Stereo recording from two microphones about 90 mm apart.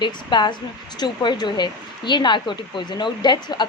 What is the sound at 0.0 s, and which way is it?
A woman's voice, 60° left (ahead or behind).